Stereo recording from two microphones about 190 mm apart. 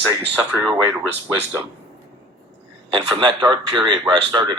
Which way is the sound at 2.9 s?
25° right (ahead or behind).